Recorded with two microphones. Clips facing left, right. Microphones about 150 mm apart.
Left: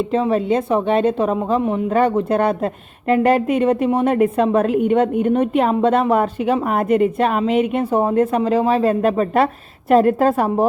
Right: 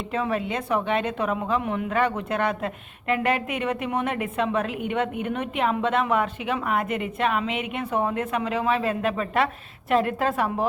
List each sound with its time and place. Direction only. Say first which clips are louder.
0.1 s a woman's voice: left 7 dB; 30° left (ahead or behind)